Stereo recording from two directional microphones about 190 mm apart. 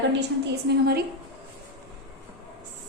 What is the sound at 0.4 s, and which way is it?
Speech, 55° right (ahead or behind).